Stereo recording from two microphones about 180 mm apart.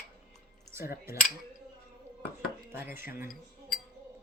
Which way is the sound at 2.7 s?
10° right (ahead or behind).